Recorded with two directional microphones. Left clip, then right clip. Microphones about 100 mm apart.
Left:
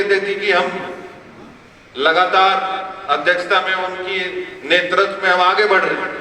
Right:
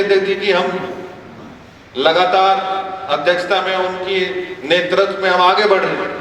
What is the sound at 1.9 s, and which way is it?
A man's voice, 45° right (ahead or behind).